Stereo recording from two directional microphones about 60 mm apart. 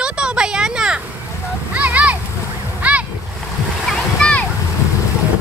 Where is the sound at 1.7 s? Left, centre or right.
Right.